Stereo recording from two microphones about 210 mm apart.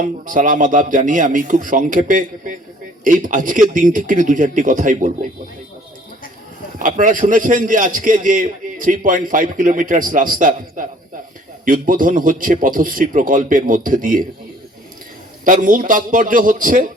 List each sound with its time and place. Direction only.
0.0 s a man's voice: 40° right (ahead or behind)
6.7 s a man's voice: 40° right (ahead or behind)
15.4 s a man's voice: 40° right (ahead or behind)